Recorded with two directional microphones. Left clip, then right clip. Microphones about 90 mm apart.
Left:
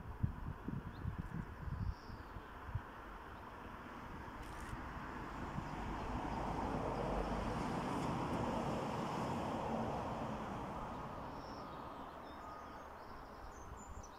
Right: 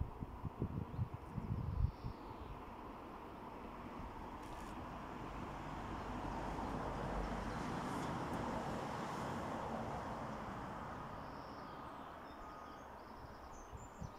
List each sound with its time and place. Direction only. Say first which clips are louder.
6.3 s vehicle: left 3 dB; 15° left (ahead or behind)